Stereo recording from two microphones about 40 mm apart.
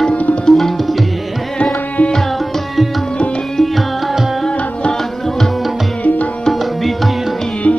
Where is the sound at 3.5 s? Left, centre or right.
Centre.